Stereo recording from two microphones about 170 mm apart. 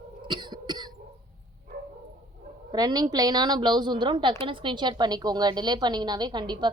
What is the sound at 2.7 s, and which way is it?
A woman's voice, 25° right (ahead or behind).